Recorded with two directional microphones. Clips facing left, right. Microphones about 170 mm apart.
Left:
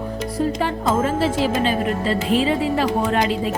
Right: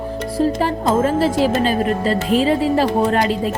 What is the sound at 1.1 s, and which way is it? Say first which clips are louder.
Speech: right 4 dB; 40° right (ahead or behind).